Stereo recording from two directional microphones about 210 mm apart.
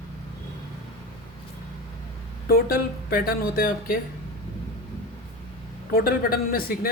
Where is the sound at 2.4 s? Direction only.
45° left (ahead or behind).